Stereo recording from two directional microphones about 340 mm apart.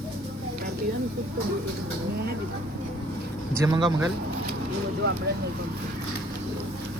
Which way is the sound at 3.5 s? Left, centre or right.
Centre.